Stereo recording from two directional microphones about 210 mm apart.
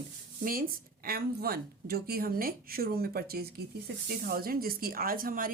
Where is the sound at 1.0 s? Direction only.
45° right (ahead or behind).